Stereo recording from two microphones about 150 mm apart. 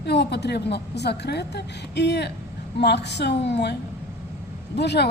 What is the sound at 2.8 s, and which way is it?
Speech, 90° left.